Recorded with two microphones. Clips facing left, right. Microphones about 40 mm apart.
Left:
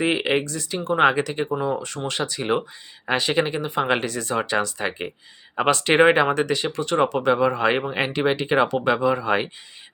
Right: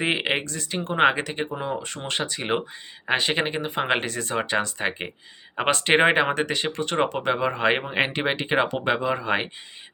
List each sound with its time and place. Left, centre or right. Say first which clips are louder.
0.0 s speech: left 3 dB; right
0.4 s speech: left 3 dB; right
2.0 s speech: left 2 dB; right